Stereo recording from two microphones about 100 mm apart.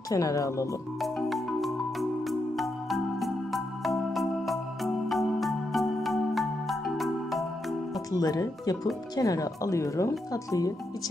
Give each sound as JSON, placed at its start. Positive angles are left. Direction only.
{"t": 0.1, "sound": "speech", "side_deg": 35}
{"t": 1.0, "sound": "music", "side_deg": 0}
{"t": 8.1, "sound": "speech", "side_deg": 40}